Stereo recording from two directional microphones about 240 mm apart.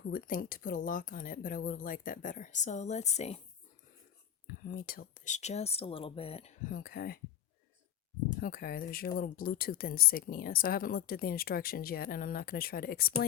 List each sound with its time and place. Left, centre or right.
0.0 s speech: left
4.4 s speech: left
8.4 s speech: left